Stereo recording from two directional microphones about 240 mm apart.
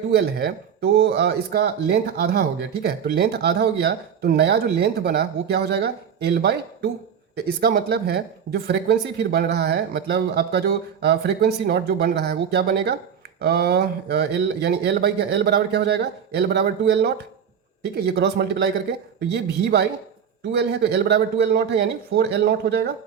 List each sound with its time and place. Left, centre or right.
0.2 s speech: right